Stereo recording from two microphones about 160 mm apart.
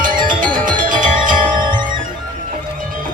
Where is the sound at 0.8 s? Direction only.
55° right (ahead or behind).